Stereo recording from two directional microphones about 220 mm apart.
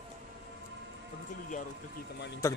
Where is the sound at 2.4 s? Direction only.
15° left (ahead or behind).